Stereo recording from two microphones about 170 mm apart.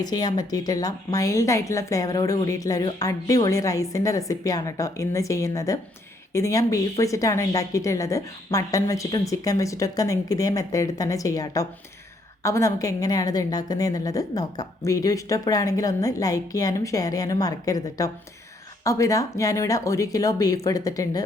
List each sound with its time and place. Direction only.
0.0 s a woman's voice: 25° left (ahead or behind)